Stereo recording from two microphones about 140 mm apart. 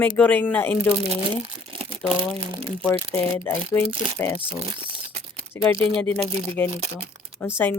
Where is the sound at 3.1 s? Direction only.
20° left (ahead or behind).